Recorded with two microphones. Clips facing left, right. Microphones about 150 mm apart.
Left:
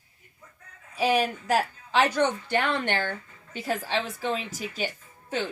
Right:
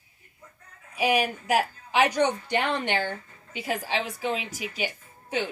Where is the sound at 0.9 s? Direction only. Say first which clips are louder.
Even; 10° right (ahead or behind).